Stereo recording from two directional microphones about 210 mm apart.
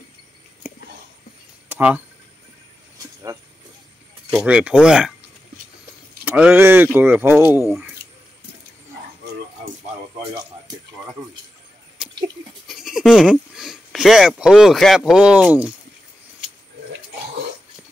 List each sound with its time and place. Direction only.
1.7 s a sound: 5° right (ahead or behind)
4.3 s speech: 5° right (ahead or behind)
6.2 s speech: 10° right (ahead or behind)
12.6 s speech: centre (ahead or behind)